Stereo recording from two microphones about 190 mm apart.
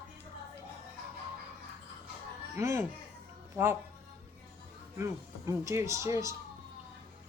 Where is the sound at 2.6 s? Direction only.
15° right (ahead or behind).